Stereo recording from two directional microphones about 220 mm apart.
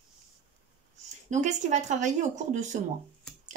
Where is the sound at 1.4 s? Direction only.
35° right (ahead or behind).